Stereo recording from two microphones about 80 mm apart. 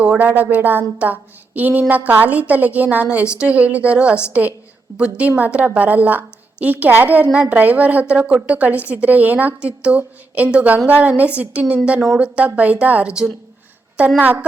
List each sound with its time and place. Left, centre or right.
0.0 s a woman's voice: centre
14.2 s a woman's voice: right